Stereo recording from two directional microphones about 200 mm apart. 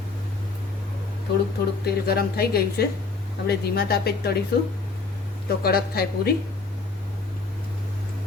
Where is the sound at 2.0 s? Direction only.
50° left (ahead or behind).